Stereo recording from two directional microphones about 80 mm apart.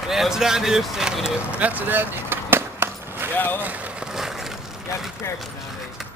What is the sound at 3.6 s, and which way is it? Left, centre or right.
Speech, centre.